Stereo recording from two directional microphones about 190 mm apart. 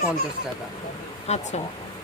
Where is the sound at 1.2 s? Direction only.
35° left (ahead or behind).